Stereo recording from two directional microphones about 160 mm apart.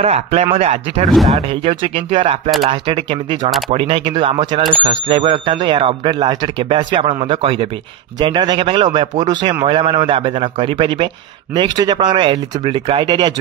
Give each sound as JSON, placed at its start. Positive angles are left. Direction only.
{"t": 0.0, "sound": "speech", "side_deg": -40}
{"t": 1.0, "sound": "speech", "side_deg": 0}
{"t": 1.5, "sound": "speech", "side_deg": -35}